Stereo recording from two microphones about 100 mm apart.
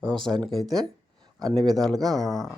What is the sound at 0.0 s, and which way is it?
Speech, 5° left (ahead or behind).